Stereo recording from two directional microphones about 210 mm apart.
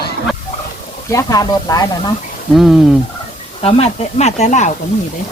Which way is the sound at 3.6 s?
30° left (ahead or behind).